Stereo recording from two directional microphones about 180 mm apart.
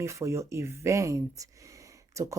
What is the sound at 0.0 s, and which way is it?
Speech, 15° right (ahead or behind).